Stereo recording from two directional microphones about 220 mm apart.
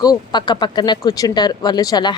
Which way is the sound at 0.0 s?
20° left (ahead or behind).